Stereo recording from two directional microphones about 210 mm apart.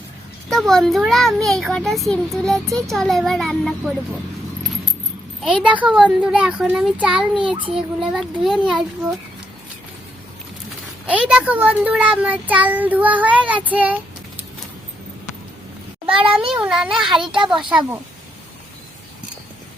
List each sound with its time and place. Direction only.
0.5 s a child's voice: centre (ahead or behind)
5.4 s a child's voice: 5° right (ahead or behind)
11.0 s a child's voice: 5° right (ahead or behind)
16.0 s speech: 25° right (ahead or behind)
16.6 s a child's voice: 5° right (ahead or behind)